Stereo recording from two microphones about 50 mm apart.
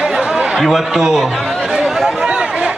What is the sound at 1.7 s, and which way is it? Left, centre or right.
Chatter, centre.